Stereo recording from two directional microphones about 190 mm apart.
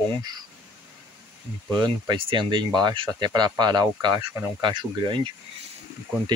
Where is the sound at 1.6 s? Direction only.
20° right (ahead or behind).